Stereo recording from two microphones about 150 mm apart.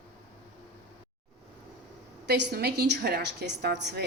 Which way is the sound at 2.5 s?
90° right.